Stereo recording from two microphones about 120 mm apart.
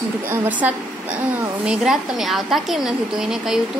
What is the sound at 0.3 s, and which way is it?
A woman's voice, 15° right (ahead or behind).